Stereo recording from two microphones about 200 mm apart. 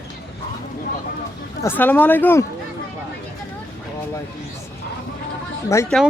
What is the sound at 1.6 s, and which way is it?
Speech, 10° left (ahead or behind).